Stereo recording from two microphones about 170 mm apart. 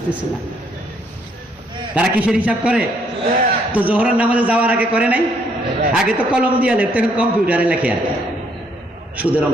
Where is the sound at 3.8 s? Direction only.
10° right (ahead or behind).